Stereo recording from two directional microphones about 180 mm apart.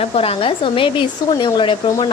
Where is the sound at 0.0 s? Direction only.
35° left (ahead or behind).